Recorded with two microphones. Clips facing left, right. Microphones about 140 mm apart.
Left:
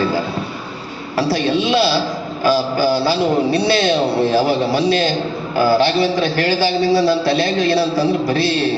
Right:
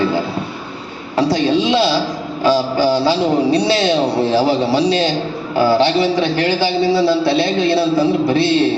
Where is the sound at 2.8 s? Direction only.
25° right (ahead or behind).